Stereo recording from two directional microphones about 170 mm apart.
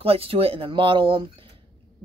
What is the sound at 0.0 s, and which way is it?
Speech, 35° right (ahead or behind).